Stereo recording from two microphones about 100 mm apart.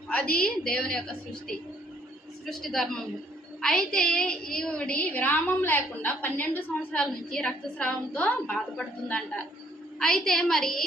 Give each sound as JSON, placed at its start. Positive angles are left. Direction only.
{"t": 0.1, "sound": "a woman's voice", "side_deg": 10}